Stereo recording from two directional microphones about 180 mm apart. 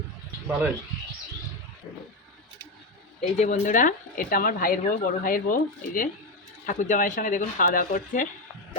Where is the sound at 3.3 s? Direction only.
40° left (ahead or behind).